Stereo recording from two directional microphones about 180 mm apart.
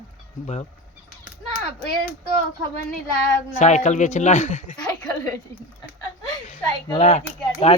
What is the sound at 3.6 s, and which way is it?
Speech, 40° left (ahead or behind).